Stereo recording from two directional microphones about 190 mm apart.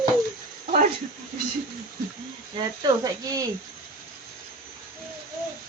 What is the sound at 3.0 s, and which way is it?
Speech, 20° right (ahead or behind).